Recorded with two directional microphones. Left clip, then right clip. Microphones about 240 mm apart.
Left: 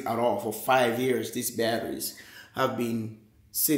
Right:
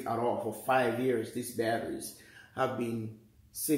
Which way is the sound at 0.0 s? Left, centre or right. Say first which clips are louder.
Left 5 dB; left.